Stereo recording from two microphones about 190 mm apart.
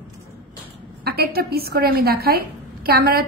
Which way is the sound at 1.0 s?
55° right (ahead or behind).